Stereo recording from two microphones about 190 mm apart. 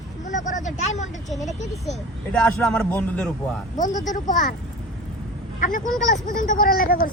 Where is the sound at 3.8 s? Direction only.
20° left (ahead or behind).